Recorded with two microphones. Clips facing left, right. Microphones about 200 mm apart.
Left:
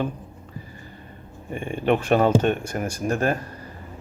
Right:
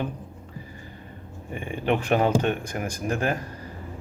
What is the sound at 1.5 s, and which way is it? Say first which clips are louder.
Speech: left 3 dB; 15° right (ahead or behind).